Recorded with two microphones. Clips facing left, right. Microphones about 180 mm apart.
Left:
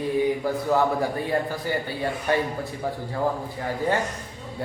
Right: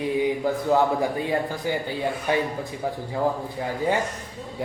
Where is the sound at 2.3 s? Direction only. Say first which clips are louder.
Even; 15° right (ahead or behind).